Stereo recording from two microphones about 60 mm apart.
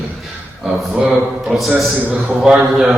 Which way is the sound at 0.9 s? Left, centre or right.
Centre.